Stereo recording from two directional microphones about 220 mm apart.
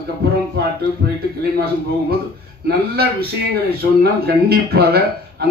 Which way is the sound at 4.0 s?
45° right (ahead or behind).